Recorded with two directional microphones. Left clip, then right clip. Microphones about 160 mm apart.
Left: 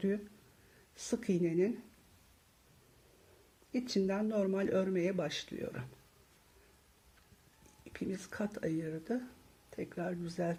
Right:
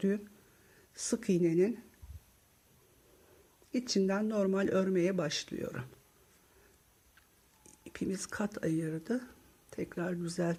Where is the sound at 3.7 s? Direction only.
30° right (ahead or behind).